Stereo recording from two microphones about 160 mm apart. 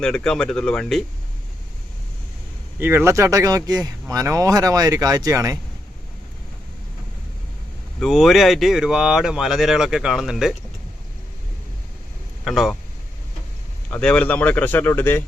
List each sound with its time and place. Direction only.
0.0 s speech: 5° left (ahead or behind)
2.7 s speech: 15° right (ahead or behind)
7.9 s speech: centre (ahead or behind)
12.5 s speech: centre (ahead or behind)
13.9 s speech: 10° left (ahead or behind)